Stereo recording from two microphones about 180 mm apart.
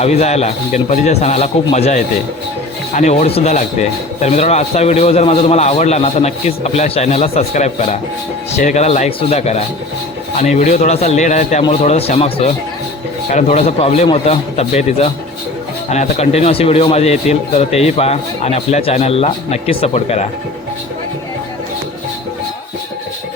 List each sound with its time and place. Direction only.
0.0 s speech: 35° left (ahead or behind)